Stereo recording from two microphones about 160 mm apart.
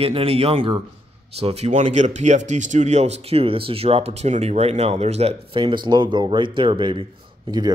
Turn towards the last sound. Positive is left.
turn(degrees=-25)  # may be behind; listen again after turning